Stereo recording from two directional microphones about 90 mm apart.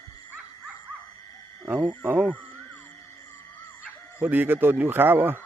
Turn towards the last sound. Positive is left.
turn(degrees=-25)  # may be behind; listen again after turning